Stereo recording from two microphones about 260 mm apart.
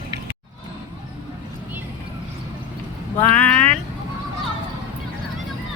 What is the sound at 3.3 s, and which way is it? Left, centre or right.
Speech, centre.